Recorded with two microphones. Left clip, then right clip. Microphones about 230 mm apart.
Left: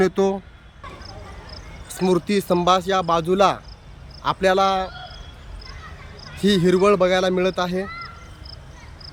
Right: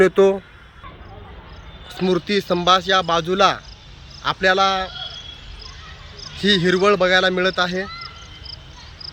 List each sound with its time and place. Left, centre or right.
0.0 s speech: centre
1.9 s speech: centre
6.1 s speech: centre